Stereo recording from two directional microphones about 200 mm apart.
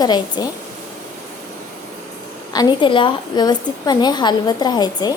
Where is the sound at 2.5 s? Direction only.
20° left (ahead or behind).